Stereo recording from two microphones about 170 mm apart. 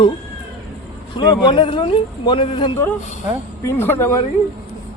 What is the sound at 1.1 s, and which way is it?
A man's voice, 25° left (ahead or behind).